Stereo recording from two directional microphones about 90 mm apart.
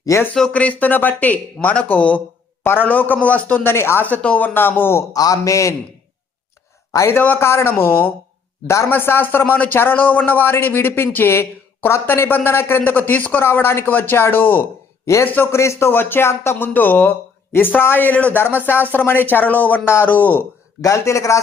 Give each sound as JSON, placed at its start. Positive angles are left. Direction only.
{"t": 0.3, "sound": "a man's voice", "side_deg": 10}
{"t": 5.1, "sound": "a man's voice", "side_deg": 40}
{"t": 6.9, "sound": "a man's voice", "side_deg": 35}
{"t": 7.2, "sound": "a man's voice", "side_deg": 25}
{"t": 15.0, "sound": "a man's voice", "side_deg": 35}
{"t": 20.8, "sound": "a man's voice", "side_deg": 35}